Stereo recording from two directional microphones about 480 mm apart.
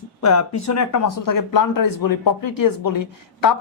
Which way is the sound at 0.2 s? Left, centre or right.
Left.